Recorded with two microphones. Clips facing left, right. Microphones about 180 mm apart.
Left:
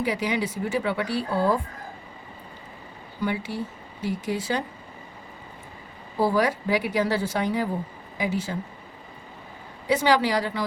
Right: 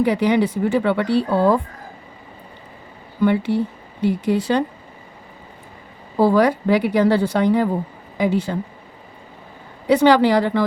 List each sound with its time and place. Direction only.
0.0 s speech: 60° right (ahead or behind)
3.2 s speech: 60° right (ahead or behind)
6.1 s speech: 60° right (ahead or behind)
9.8 s speech: 60° right (ahead or behind)